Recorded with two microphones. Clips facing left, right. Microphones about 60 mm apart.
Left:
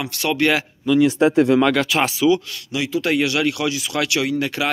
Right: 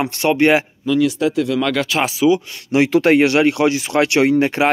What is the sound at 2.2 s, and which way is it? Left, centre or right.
Speech, right.